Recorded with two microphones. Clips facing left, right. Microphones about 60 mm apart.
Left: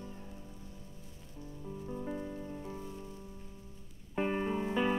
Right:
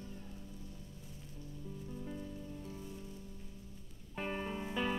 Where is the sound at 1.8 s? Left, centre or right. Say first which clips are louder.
Left 7 dB; left.